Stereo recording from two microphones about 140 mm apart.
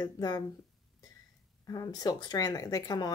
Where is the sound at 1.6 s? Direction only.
25° left (ahead or behind).